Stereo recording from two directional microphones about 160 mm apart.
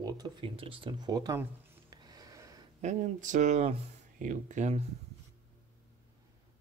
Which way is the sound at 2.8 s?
50° right (ahead or behind).